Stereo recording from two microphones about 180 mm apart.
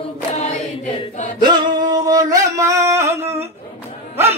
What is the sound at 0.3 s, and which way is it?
Chant, 40° left (ahead or behind).